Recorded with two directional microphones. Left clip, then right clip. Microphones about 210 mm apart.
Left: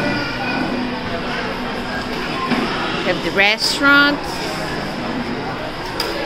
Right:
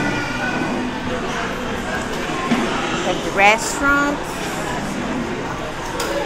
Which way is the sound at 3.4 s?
40° left (ahead or behind).